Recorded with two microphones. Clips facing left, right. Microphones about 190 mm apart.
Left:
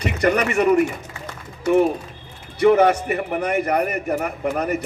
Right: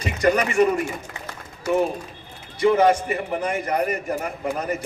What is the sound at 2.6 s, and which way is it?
A man's voice, 60° left (ahead or behind).